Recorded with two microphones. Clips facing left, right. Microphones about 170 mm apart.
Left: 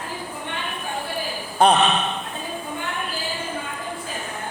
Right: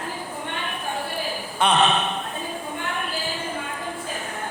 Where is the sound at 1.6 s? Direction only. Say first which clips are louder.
Left 6 dB; 35° left (ahead or behind).